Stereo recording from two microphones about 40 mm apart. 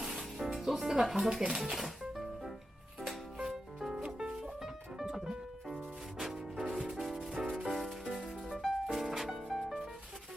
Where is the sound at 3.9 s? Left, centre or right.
Right.